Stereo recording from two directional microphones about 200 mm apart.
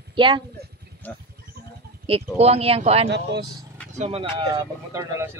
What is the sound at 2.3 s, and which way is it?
A woman's voice, 30° right (ahead or behind).